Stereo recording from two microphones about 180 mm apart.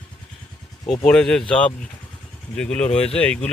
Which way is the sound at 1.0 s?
5° left (ahead or behind).